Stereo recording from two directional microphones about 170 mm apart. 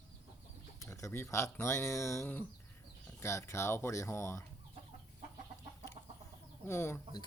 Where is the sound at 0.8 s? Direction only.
15° left (ahead or behind).